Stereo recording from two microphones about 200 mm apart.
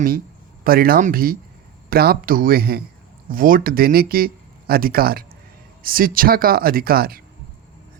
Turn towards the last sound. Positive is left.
turn(degrees=-50)  # may be behind; listen again after turning